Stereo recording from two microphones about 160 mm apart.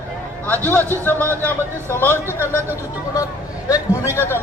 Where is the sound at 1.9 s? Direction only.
15° left (ahead or behind).